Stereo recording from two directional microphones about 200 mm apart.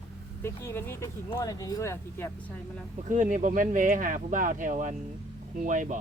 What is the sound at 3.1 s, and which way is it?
Speech, 40° right (ahead or behind).